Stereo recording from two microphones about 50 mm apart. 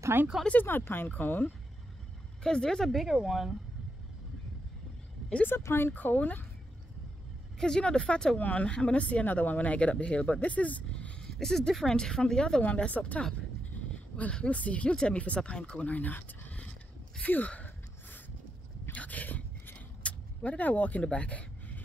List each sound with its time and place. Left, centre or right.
0.6 s speech: left
1.0 s speech: left
2.4 s speech: centre
2.9 s speech: centre
5.6 s speech: left
7.5 s speech: centre
8.4 s speech: left
11.3 s speech: centre
11.9 s speech: centre
12.6 s speech: left
13.9 s a sound: left
14.3 s speech: left
15.8 s speech: left
18.9 s a sound: left